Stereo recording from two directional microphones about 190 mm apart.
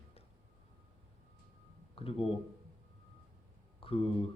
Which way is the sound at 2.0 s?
30° left (ahead or behind).